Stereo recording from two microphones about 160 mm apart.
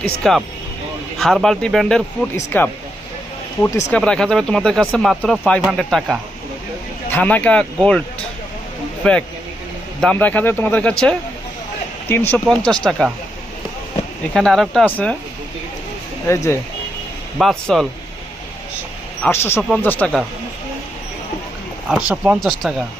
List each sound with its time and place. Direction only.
0.0 s speech: 5° left (ahead or behind)
2.5 s speech: 10° left (ahead or behind)
3.9 s speech: 5° left (ahead or behind)
7.1 s speech: 10° left (ahead or behind)
9.0 s speech: 5° left (ahead or behind)
14.3 s speech: centre (ahead or behind)
16.2 s speech: 15° left (ahead or behind)
17.3 s speech: centre (ahead or behind)
19.2 s speech: 15° left (ahead or behind)
22.1 s speech: 10° right (ahead or behind)